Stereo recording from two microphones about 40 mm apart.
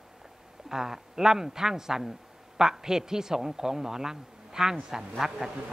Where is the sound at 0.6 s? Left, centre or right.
Centre.